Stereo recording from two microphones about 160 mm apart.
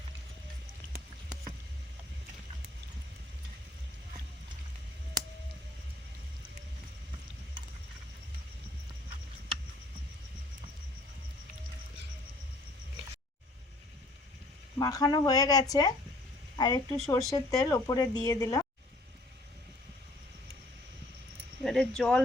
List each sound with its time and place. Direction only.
14.8 s a woman's voice: 20° left (ahead or behind)
21.6 s cricket: centre (ahead or behind)